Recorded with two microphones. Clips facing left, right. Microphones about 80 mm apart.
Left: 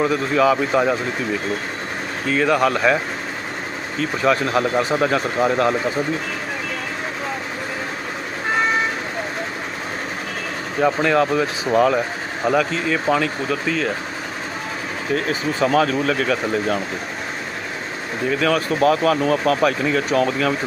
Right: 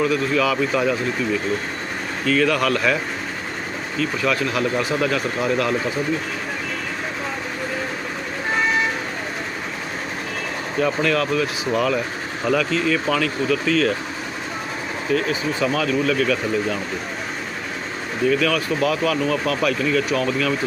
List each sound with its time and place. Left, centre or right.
0.0 s speech: left
2.2 s speech: left
10.8 s speech: left
15.1 s speech: left
18.3 s speech: left